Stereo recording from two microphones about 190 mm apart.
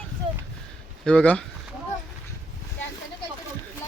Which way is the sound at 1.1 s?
5° left (ahead or behind).